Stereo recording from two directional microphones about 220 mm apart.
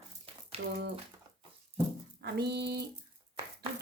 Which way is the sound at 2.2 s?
50° right (ahead or behind).